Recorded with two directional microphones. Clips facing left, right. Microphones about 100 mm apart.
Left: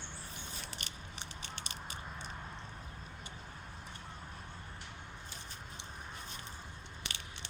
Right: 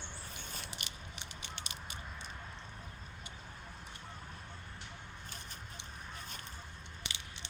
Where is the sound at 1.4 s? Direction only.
40° left (ahead or behind).